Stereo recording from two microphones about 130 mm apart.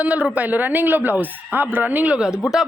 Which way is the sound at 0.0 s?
10° right (ahead or behind).